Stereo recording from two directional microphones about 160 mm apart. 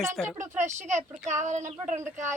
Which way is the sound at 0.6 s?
50° right (ahead or behind).